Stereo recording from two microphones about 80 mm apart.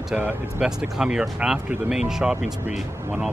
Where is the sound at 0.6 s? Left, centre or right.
Centre.